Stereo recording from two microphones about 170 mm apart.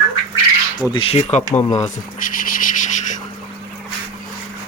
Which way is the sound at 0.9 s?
35° left (ahead or behind).